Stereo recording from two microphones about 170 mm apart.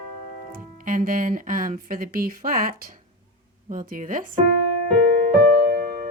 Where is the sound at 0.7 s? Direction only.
55° right (ahead or behind).